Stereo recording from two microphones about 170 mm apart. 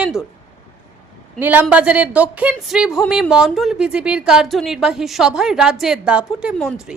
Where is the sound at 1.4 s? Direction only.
10° right (ahead or behind).